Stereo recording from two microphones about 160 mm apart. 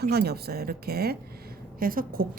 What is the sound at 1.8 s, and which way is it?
Speech, 65° right (ahead or behind).